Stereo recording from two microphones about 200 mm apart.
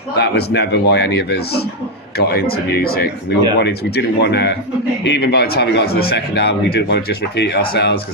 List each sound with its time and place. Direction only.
0.2 s a man's voice: 55° left (ahead or behind)